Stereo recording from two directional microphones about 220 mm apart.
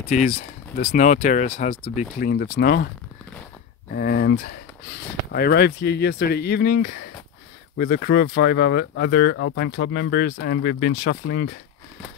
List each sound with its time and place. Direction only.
0.1 s speech: 35° left (ahead or behind)
3.9 s speech: 45° left (ahead or behind)